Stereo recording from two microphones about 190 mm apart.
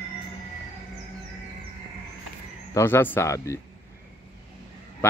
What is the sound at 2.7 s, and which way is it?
Speech, 10° left (ahead or behind).